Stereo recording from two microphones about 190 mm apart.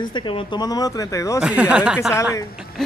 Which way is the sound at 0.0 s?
25° left (ahead or behind).